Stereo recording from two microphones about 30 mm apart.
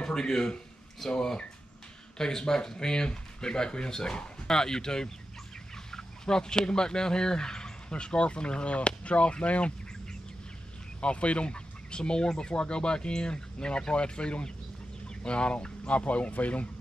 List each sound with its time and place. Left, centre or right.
0.0 s speech: left
11.0 s speech: left